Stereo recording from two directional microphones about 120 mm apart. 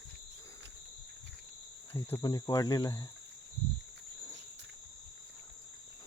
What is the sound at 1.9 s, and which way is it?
Cricket, 20° left (ahead or behind).